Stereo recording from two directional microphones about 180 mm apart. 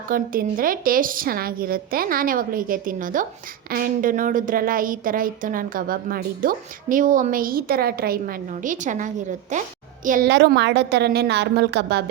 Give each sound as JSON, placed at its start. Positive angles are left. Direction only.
{"t": 0.1, "sound": "a woman's voice", "side_deg": -50}
{"t": 10.2, "sound": "a woman's voice", "side_deg": -75}